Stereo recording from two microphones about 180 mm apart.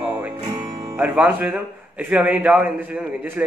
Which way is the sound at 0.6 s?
20° right (ahead or behind).